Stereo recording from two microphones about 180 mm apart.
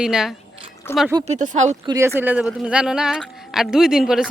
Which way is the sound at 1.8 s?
20° right (ahead or behind).